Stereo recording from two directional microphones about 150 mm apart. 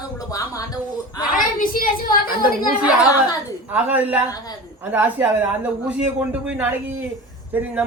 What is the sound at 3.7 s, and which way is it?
Speech, 10° right (ahead or behind).